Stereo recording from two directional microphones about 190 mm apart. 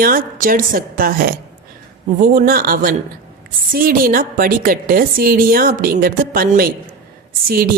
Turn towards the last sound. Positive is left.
turn(degrees=-50)  # may be behind; listen again after turning